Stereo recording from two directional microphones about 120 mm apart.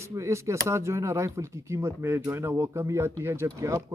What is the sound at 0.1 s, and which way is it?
Speech, 25° right (ahead or behind).